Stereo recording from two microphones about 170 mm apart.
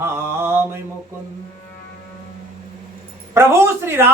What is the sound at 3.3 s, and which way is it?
Music, 15° right (ahead or behind).